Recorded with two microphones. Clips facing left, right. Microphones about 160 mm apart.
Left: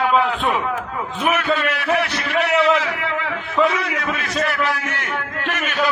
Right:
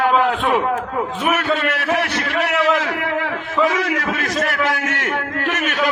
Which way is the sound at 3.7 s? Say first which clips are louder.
Right 3 dB; 70° right (ahead or behind).